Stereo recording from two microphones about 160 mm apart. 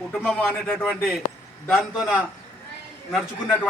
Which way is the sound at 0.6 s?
5° left (ahead or behind).